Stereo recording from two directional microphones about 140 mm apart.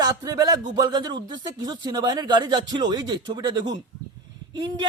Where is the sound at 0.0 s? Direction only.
30° right (ahead or behind).